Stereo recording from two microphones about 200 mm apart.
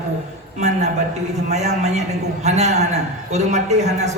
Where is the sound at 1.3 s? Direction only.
35° right (ahead or behind).